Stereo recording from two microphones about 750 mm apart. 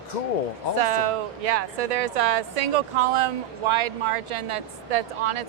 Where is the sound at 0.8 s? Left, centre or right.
Right.